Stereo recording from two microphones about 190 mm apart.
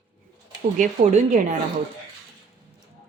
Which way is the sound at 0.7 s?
40° right (ahead or behind).